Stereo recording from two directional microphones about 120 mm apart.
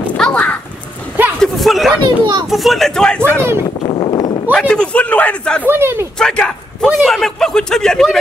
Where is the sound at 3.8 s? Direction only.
50° left (ahead or behind).